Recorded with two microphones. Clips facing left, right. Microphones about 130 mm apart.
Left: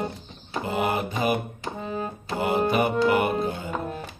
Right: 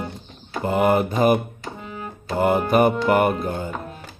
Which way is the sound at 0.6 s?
50° right (ahead or behind).